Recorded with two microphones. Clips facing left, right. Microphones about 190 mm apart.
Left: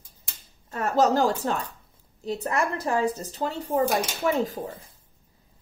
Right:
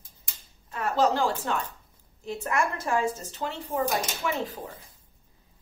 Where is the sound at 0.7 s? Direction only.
45° left (ahead or behind).